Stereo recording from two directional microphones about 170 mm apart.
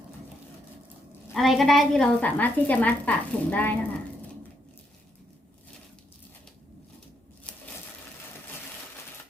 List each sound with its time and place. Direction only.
1.3 s a woman's voice: centre (ahead or behind)